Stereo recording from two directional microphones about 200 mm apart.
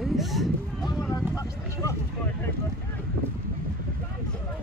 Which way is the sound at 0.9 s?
15° left (ahead or behind).